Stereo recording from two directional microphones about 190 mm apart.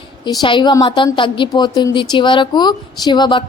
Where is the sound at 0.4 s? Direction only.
25° left (ahead or behind).